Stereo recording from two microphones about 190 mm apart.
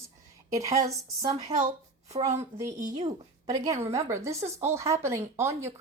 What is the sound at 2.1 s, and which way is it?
Speech, 35° right (ahead or behind).